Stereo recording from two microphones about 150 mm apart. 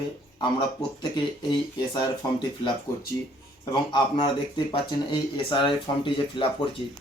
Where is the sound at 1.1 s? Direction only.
30° left (ahead or behind).